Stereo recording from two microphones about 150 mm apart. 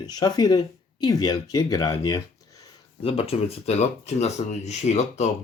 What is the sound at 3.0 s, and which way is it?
Speech, 40° left (ahead or behind).